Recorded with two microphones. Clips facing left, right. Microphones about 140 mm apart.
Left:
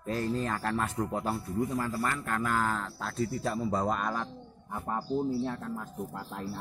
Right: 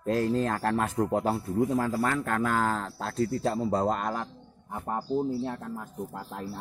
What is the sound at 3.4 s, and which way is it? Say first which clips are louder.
Speech: right 3 dB; 30° right (ahead or behind).